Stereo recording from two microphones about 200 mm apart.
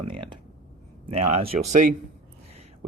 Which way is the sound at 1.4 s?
30° right (ahead or behind).